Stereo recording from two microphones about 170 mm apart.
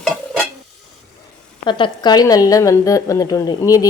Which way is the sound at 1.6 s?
25° left (ahead or behind).